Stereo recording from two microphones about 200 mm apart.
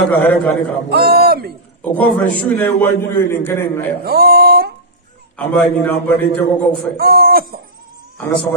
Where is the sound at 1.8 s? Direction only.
10° left (ahead or behind).